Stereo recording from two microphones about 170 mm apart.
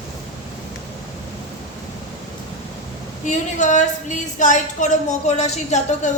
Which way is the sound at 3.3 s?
45° left (ahead or behind).